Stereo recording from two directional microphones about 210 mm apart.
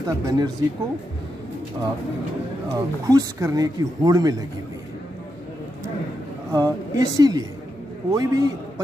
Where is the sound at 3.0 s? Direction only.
15° right (ahead or behind).